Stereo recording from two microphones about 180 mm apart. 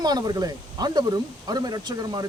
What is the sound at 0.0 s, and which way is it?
Speech, 20° right (ahead or behind).